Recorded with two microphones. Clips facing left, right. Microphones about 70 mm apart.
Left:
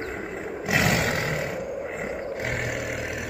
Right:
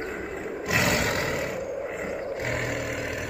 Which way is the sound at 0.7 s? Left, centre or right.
Left.